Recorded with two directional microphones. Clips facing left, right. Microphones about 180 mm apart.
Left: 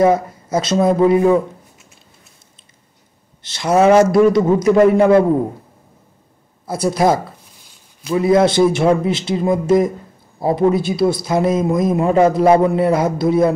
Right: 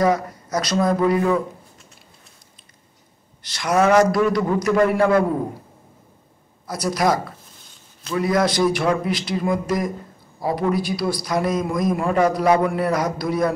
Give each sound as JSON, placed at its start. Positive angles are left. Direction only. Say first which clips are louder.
{"t": 0.0, "sound": "speech", "louder": "left 5 dB", "side_deg": 25}
{"t": 3.4, "sound": "speech", "louder": "left 5 dB", "side_deg": 25}
{"t": 6.7, "sound": "speech", "louder": "left 5 dB", "side_deg": 25}